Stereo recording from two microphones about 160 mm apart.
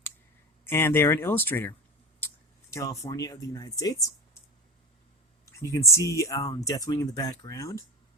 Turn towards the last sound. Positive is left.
turn(degrees=20)  # may be behind; listen again after turning